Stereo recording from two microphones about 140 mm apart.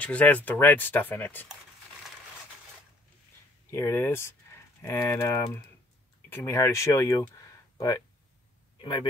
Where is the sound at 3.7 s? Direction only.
15° left (ahead or behind).